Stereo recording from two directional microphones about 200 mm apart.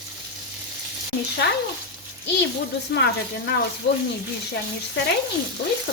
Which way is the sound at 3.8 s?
55° left (ahead or behind).